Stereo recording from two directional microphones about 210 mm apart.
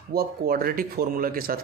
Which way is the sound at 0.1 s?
45° right (ahead or behind).